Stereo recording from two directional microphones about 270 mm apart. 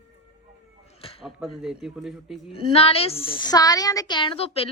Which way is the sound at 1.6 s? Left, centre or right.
Centre.